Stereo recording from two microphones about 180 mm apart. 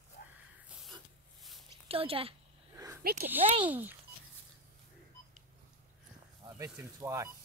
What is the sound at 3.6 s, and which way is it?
Speech, 10° right (ahead or behind).